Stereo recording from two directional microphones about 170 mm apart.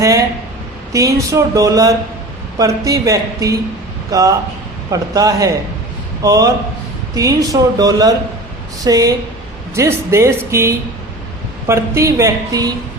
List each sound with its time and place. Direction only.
0.9 s speech: 20° right (ahead or behind)